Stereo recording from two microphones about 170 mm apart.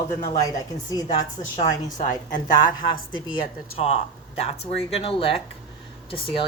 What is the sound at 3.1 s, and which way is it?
A woman's voice, 30° left (ahead or behind).